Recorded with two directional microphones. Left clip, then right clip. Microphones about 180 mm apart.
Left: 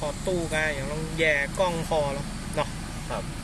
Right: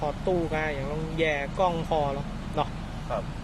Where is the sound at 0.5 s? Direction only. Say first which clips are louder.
Left 2 dB; 20° right (ahead or behind).